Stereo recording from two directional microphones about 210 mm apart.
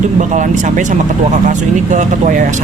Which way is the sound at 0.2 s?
35° right (ahead or behind).